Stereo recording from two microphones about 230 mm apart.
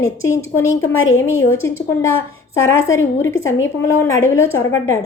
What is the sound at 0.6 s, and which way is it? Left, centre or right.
Speech, left.